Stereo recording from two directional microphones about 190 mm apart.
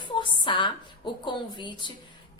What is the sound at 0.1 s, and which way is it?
A woman's voice, 25° left (ahead or behind).